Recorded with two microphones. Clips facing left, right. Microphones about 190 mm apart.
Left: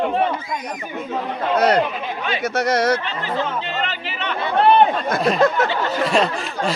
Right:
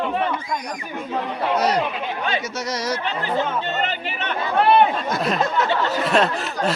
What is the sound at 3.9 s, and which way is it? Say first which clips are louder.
Speech: even; 45° right (ahead or behind).